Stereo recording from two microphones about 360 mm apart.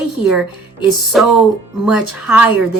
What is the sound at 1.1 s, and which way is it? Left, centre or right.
A woman's voice, centre.